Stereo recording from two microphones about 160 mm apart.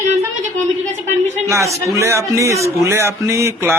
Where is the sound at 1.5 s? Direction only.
20° right (ahead or behind).